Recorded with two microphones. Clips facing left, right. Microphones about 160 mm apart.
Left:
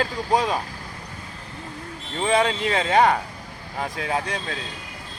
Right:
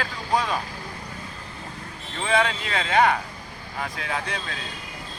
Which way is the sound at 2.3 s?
30° left (ahead or behind).